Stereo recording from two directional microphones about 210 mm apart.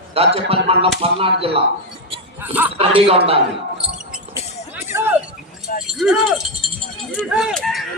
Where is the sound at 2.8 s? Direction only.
25° right (ahead or behind).